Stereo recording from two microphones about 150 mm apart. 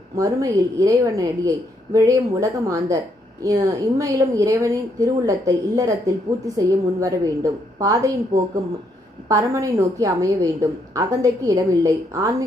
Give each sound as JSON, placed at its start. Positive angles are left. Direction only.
{"t": 0.2, "sound": "a woman's voice", "side_deg": -20}
{"t": 9.3, "sound": "a woman's voice", "side_deg": -20}